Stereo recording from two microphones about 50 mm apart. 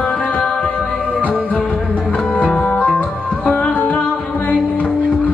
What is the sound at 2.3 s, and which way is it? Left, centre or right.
Music, left.